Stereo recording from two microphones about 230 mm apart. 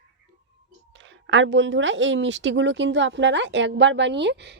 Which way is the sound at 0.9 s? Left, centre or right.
Right.